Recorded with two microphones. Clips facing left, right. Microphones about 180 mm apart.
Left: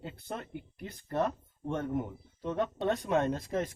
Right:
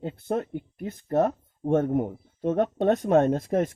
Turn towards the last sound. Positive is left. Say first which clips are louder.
# right 8 dB
turn(degrees=-50)  # may be behind; listen again after turning